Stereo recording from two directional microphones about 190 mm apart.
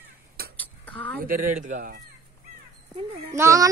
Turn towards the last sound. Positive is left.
turn(degrees=-15)  # may be behind; listen again after turning